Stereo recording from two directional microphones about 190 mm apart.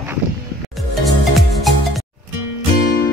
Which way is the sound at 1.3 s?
Centre (ahead or behind).